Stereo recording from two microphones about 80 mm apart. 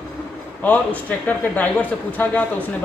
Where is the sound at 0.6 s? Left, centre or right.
Centre.